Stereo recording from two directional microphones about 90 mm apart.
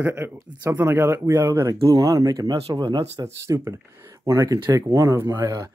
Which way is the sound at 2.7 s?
55° right (ahead or behind).